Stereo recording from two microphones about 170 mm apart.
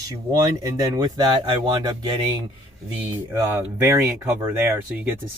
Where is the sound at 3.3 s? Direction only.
15° right (ahead or behind).